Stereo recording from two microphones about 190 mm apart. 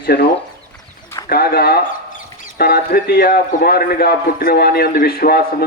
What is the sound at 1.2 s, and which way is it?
A man's voice, 55° left (ahead or behind).